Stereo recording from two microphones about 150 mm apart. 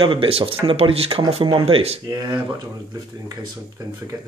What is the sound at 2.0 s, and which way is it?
Speech, 25° right (ahead or behind).